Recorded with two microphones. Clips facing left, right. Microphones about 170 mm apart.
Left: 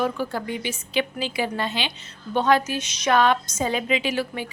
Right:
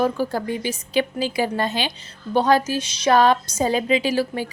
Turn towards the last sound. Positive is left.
turn(degrees=-35)  # may be behind; listen again after turning